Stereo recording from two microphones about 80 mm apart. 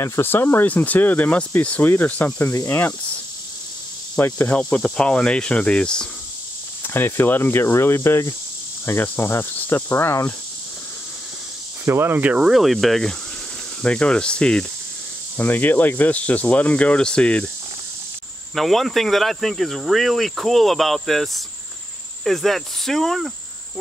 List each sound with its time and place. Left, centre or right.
0.0 s speech: left
4.2 s speech: left
4.6 s speech: centre
6.8 s speech: left
8.8 s speech: left
11.8 s speech: right
12.4 s speech: centre
13.8 s speech: centre
15.3 s speech: left
18.5 s speech: centre